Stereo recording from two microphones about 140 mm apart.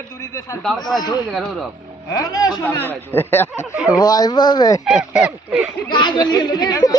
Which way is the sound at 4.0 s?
30° left (ahead or behind).